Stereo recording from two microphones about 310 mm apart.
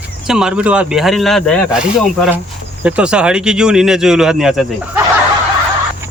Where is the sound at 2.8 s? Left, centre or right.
Centre.